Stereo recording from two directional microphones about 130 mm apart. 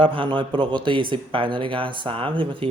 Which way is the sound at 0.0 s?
40° right (ahead or behind).